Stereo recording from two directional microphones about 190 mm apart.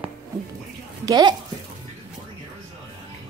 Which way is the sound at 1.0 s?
20° right (ahead or behind).